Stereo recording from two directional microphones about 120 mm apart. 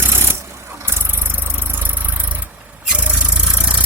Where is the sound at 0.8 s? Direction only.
20° right (ahead or behind).